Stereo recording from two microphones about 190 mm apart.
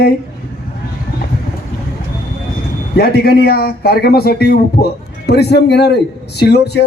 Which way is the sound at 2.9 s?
55° left (ahead or behind).